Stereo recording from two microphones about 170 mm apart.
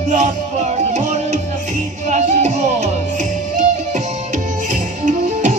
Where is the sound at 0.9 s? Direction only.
45° right (ahead or behind).